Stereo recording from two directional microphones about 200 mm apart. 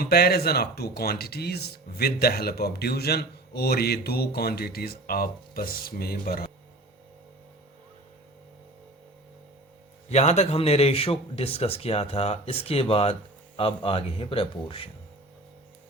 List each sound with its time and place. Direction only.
0.0 s speech: 50° left (ahead or behind)
10.1 s speech: 35° left (ahead or behind)